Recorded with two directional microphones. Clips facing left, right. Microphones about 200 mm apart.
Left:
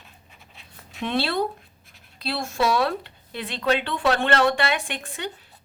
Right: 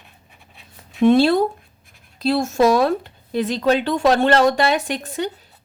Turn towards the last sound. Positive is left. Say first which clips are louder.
# right 8 dB
turn(degrees=-40)  # may be behind; listen again after turning